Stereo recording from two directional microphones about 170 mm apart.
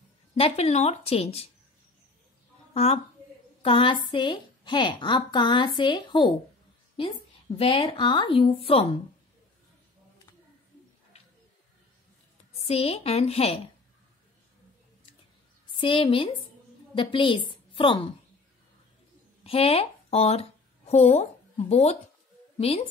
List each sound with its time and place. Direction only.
0.3 s a woman's voice: 35° left (ahead or behind)
2.7 s a woman's voice: 35° left (ahead or behind)
7.5 s a woman's voice: 35° left (ahead or behind)
12.6 s a woman's voice: 35° left (ahead or behind)
15.7 s a woman's voice: 30° left (ahead or behind)
19.4 s speech: 35° left (ahead or behind)